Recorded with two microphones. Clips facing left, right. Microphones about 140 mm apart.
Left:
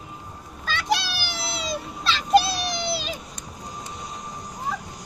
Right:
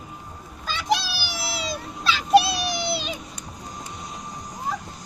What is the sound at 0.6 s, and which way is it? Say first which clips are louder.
Children playing: left 2 dB; 10° right (ahead or behind).